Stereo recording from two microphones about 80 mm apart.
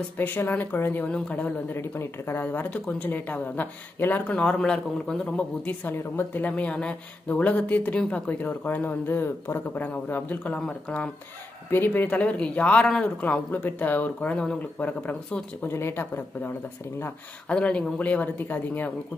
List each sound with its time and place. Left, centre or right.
0.2 s speech: left
1.8 s speech: left
2.4 s speech: left
5.9 s speech: left
12.8 s speech: centre
13.2 s speech: centre
17.5 s speech: centre